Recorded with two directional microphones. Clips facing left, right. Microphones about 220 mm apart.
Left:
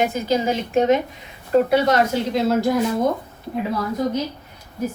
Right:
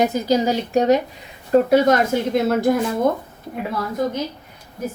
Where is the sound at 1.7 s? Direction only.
50° right (ahead or behind).